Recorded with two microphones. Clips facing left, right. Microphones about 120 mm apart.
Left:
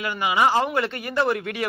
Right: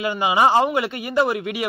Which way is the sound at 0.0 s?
25° right (ahead or behind).